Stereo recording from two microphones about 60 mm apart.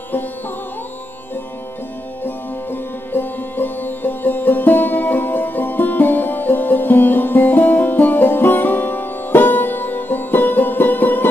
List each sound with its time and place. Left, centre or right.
2.2 s music: left